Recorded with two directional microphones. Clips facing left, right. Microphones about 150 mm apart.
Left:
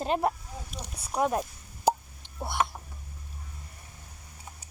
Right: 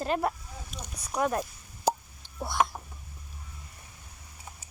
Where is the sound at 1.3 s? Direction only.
20° left (ahead or behind).